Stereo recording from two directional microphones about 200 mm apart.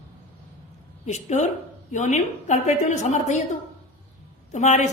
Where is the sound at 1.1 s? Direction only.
35° left (ahead or behind).